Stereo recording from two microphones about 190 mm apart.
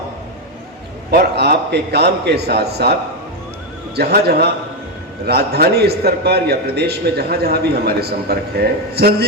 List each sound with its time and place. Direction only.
1.1 s a man's voice: 55° right (ahead or behind)
3.9 s a man's voice: 55° right (ahead or behind)